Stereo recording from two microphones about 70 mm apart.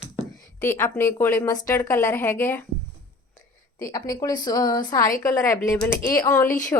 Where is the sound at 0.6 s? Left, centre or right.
Left.